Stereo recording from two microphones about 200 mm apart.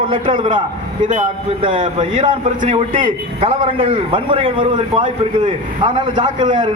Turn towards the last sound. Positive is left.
turn(degrees=-25)  # may be behind; listen again after turning